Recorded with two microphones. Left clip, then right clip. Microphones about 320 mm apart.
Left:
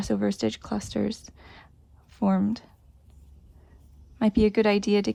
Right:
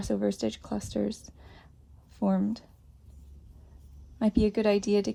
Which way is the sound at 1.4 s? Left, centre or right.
Right.